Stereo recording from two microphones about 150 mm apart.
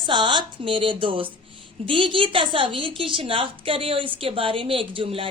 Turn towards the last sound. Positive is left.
turn(degrees=-35)  # may be behind; listen again after turning